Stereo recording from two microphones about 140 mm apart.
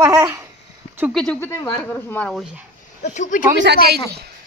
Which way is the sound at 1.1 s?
5° left (ahead or behind).